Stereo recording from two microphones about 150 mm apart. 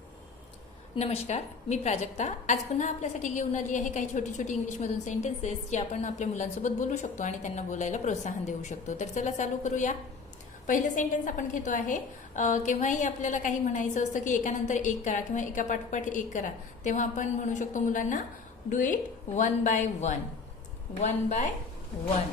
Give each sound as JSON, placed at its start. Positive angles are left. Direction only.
{"t": 0.9, "sound": "a woman's voice", "side_deg": 45}